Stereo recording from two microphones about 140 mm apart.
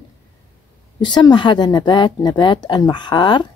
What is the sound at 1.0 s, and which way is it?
A woman's voice, 35° left (ahead or behind).